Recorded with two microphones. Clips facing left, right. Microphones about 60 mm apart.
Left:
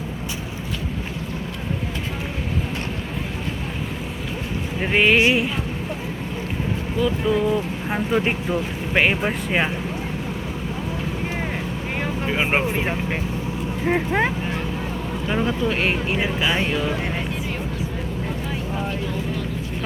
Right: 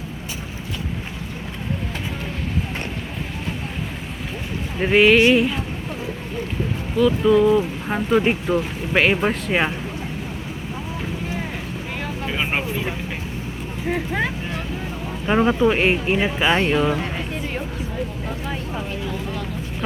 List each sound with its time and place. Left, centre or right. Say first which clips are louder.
4.8 s speech: right 4 dB; centre
5.1 s a sound: right 3 dB; centre
7.0 s speech: right 6 dB; centre
8.4 s speech: right 2 dB; centre
9.0 s speech: right 2 dB; centre
12.2 s vehicle: left 3 dB; centre
12.7 s speech: left 3 dB; left
15.3 s speech: right 6 dB; right
15.8 s speech: right 3 dB; right